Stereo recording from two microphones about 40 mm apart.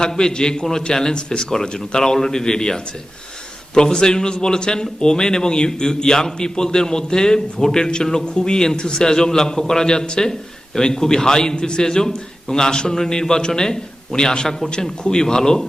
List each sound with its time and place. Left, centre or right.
0.0 s a man's voice: centre